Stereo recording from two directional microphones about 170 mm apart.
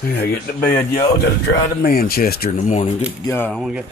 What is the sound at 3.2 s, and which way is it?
Speech, 15° left (ahead or behind).